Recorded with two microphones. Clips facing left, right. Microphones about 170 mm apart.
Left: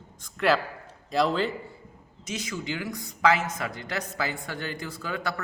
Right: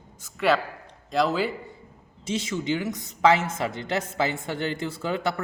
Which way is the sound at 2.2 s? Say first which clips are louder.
Right 5 dB; 25° right (ahead or behind).